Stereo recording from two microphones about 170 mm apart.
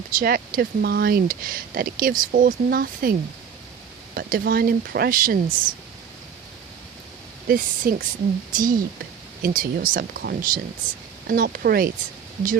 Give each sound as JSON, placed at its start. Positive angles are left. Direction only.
{"t": 0.2, "sound": "speech", "side_deg": -60}
{"t": 7.4, "sound": "speech", "side_deg": -55}